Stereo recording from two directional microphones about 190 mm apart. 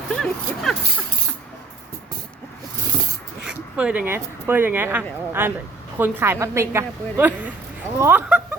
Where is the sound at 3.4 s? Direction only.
5° right (ahead or behind).